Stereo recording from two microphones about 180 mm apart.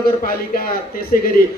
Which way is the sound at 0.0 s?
55° left (ahead or behind).